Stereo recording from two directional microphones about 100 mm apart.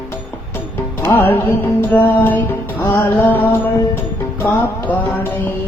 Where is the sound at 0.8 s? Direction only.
20° left (ahead or behind).